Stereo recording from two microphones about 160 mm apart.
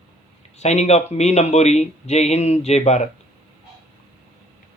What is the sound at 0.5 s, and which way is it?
Speech, 45° left (ahead or behind).